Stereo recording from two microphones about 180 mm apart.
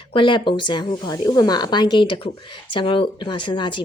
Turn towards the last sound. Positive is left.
turn(degrees=25)  # may be behind; listen again after turning